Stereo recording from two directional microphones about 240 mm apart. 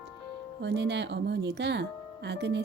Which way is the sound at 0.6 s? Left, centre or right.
Right.